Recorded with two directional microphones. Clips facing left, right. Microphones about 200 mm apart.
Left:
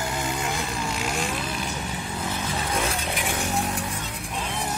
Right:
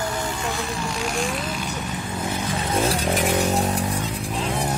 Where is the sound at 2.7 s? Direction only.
35° right (ahead or behind).